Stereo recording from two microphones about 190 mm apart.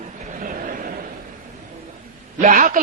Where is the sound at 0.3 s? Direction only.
45° right (ahead or behind).